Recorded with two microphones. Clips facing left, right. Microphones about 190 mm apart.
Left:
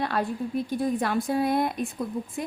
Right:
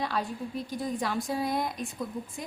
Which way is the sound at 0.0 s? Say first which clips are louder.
Left 4 dB; 60° left (ahead or behind).